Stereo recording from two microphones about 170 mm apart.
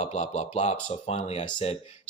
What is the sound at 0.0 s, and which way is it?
Speech, 40° left (ahead or behind).